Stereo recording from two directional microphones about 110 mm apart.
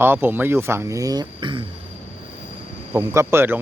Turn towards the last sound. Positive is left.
turn(degrees=-20)  # may be behind; listen again after turning